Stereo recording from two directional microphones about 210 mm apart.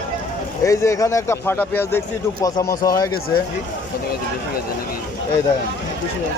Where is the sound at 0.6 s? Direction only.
15° left (ahead or behind).